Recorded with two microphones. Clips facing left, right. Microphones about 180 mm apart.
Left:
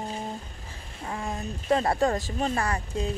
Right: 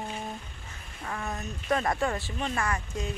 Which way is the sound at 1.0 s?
25° left (ahead or behind).